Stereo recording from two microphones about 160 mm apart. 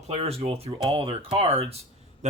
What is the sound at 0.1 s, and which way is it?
Speech, 40° right (ahead or behind).